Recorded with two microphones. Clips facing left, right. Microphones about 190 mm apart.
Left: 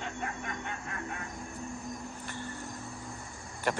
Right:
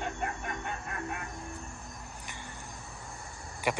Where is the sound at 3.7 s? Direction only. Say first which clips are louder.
Even; 10° right (ahead or behind).